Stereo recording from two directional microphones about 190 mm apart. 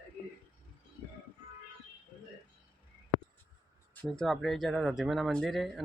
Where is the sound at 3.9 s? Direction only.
5° left (ahead or behind).